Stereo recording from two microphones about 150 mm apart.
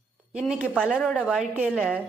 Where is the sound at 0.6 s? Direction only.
5° right (ahead or behind).